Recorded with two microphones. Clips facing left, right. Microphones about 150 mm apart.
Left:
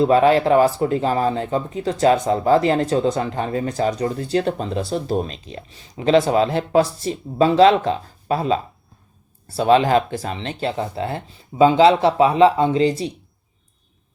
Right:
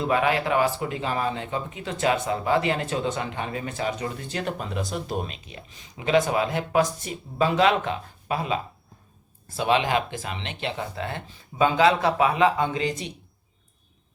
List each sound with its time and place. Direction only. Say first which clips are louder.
0.0 s speech: left 9 dB; 35° left (ahead or behind)